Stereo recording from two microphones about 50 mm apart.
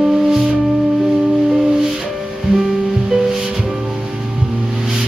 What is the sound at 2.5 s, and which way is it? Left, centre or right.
Music, centre.